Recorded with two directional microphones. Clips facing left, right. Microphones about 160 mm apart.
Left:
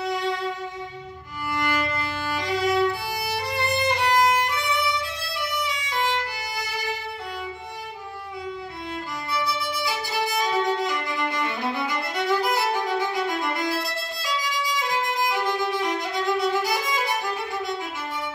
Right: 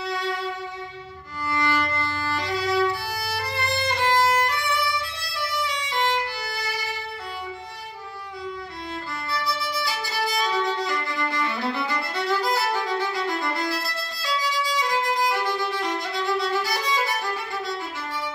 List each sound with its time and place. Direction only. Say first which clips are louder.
1.5 s violin: right 1 dB; 15° left (ahead or behind)
9.3 s violin: left 1 dB; 20° left (ahead or behind)
15.2 s violin: even; 20° left (ahead or behind)